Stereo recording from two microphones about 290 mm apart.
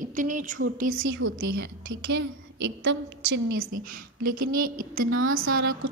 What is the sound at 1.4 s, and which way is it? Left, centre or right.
A woman's voice, right.